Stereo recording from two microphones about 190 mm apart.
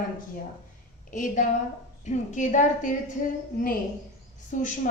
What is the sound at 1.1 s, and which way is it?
A woman's voice, 40° left (ahead or behind).